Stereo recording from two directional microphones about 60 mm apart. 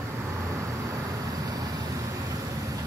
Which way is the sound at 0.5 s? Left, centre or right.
Right.